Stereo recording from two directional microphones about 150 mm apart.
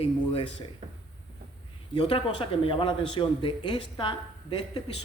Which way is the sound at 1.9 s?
35° left (ahead or behind).